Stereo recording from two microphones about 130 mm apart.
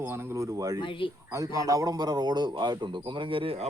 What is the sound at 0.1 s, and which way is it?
Speech, 25° right (ahead or behind).